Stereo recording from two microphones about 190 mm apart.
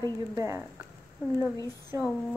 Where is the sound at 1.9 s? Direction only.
15° right (ahead or behind).